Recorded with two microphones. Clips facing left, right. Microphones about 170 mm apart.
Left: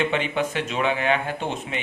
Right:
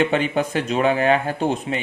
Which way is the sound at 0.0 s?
40° right (ahead or behind).